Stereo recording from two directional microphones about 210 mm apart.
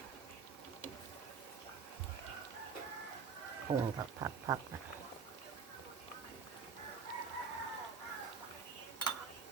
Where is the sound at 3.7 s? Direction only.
25° right (ahead or behind).